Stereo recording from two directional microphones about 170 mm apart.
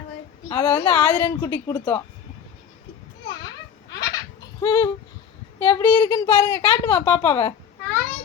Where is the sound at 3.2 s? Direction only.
25° left (ahead or behind).